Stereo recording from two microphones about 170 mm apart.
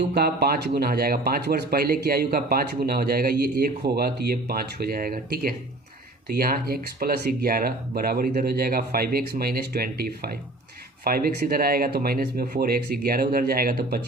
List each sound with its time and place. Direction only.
0.1 s speech: 70° right (ahead or behind)